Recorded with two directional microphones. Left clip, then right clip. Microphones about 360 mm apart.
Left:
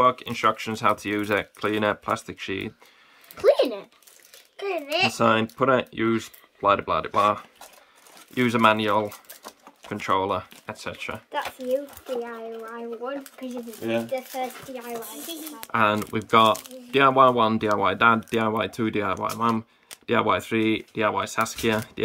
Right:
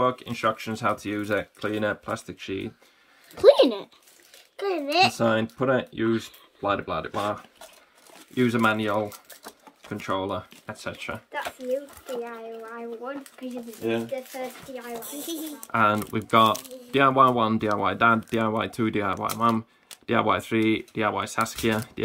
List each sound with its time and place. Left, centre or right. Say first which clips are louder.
0.0 s speech: left 4 dB; centre
3.3 s speech: right 3 dB; right
4.8 s speech: even; centre
8.4 s speech: left 3 dB; centre
11.3 s speech: left 3 dB; centre
15.7 s speech: even; centre